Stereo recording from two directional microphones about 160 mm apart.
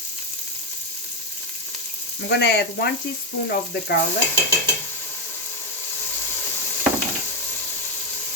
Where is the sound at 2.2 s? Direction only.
90° left.